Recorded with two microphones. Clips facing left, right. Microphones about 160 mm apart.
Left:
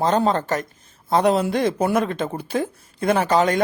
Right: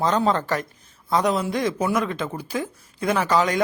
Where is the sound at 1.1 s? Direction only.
55° left (ahead or behind).